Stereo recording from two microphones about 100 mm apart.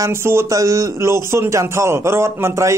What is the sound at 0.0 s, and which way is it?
Speech, 25° right (ahead or behind).